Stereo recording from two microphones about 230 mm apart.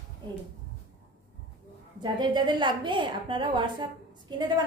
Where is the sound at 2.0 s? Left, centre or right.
Centre.